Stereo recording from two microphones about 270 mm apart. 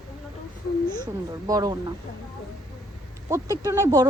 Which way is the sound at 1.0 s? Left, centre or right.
Centre.